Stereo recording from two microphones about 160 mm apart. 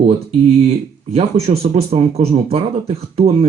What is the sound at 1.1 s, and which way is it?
Speech, 40° right (ahead or behind).